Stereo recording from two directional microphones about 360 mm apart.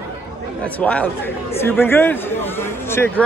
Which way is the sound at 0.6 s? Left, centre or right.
Centre.